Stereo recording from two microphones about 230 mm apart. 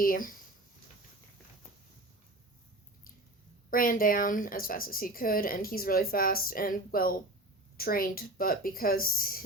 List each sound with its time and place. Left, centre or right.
0.0 s a woman's voice: left
3.7 s a woman's voice: left